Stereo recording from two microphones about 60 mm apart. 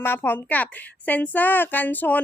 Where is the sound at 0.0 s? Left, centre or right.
Left.